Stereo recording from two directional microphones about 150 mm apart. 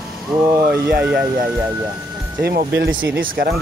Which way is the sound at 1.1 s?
75° right (ahead or behind).